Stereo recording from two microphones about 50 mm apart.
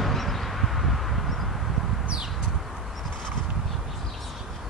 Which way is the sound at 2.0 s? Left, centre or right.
Right.